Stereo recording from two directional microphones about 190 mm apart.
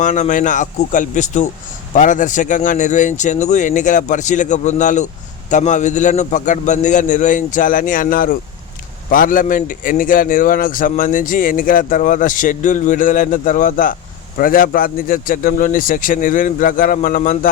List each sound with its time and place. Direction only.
0.0 s a man's voice: 40° left (ahead or behind)